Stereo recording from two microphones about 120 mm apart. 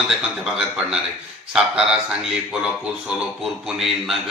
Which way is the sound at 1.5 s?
5° right (ahead or behind).